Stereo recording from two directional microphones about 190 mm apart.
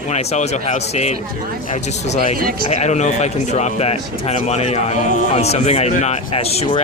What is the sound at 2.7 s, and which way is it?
Speech, 35° left (ahead or behind).